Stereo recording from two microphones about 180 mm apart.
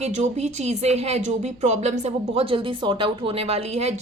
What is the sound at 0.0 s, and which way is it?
Speech, 40° right (ahead or behind).